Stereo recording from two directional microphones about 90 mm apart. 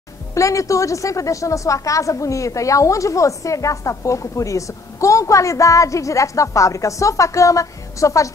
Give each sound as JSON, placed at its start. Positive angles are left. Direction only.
{"t": 0.3, "sound": "a woman's voice", "side_deg": 35}